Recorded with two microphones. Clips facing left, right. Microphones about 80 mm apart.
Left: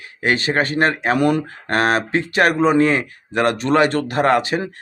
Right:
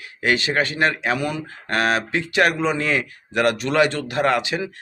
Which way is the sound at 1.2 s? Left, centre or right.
Left.